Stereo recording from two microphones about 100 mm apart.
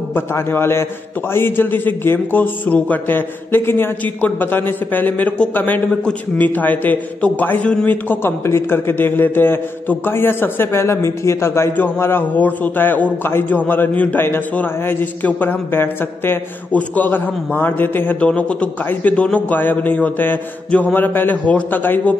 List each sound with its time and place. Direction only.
0.1 s a man's voice: 25° left (ahead or behind)